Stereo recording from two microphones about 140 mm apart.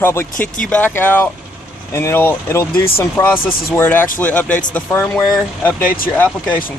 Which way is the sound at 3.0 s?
15° left (ahead or behind).